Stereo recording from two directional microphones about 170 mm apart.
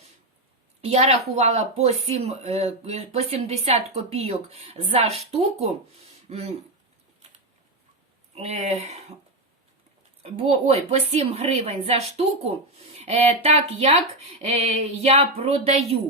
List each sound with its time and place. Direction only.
0.9 s speech: 40° right (ahead or behind)
8.4 s speech: 40° right (ahead or behind)
10.2 s speech: 35° right (ahead or behind)